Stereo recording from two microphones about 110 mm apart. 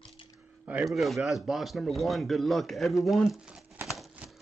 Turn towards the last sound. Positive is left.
turn(degrees=-5)  # may be behind; listen again after turning